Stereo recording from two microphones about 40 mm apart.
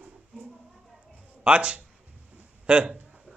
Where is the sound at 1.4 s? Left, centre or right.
Right.